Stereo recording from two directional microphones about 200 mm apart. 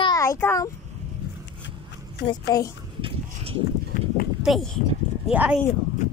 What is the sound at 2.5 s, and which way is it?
Speech, 20° left (ahead or behind).